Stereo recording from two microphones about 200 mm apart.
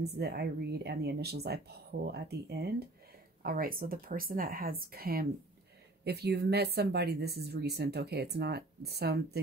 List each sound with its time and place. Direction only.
0.0 s speech: 55° right (ahead or behind)